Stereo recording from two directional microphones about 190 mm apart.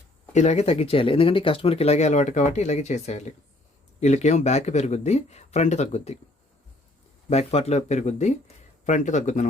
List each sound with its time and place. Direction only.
0.3 s speech: 35° left (ahead or behind)
7.3 s speech: 35° left (ahead or behind)